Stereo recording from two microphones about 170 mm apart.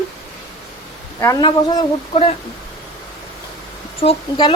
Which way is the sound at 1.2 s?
20° left (ahead or behind).